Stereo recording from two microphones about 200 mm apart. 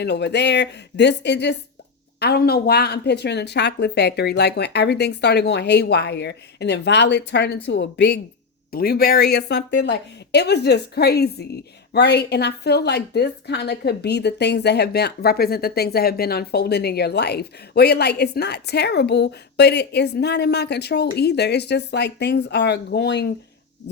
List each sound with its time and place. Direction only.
0.0 s speech: 55° left (ahead or behind)